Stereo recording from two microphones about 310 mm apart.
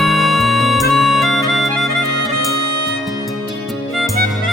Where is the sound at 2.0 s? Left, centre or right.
Right.